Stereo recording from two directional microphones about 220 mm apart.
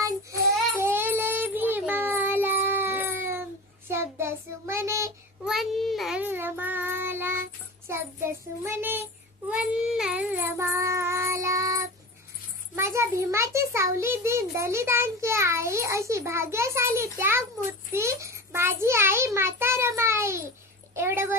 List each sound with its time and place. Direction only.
0.8 s child singing: 10° right (ahead or behind)
5.5 s child singing: centre (ahead or behind)
7.9 s a child's voice: 10° right (ahead or behind)
9.5 s child singing: 5° right (ahead or behind)
12.7 s a child's voice: 10° right (ahead or behind)